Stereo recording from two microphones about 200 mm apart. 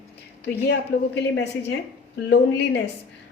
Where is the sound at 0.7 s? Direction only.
60° left (ahead or behind).